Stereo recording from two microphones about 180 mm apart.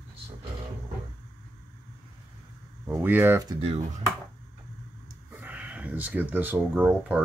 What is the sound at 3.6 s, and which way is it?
Speech, 35° right (ahead or behind).